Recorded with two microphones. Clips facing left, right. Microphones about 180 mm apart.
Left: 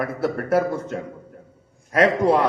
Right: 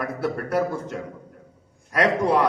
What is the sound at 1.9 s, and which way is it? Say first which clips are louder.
Speech: left 3 dB; 25° left (ahead or behind).